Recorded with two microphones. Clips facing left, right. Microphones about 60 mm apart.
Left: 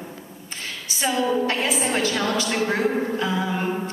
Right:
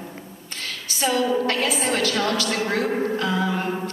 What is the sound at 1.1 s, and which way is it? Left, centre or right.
A woman's voice, left.